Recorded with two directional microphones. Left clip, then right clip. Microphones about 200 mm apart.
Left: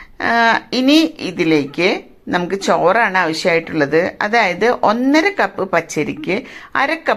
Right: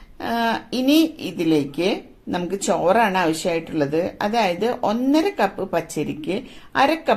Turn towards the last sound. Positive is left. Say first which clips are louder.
# left 2 dB
turn(degrees=15)  # may be behind; listen again after turning